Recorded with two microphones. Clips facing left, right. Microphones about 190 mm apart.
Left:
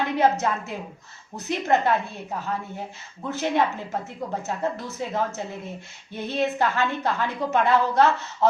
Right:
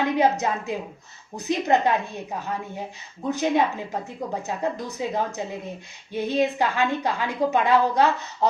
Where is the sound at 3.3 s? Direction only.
15° right (ahead or behind).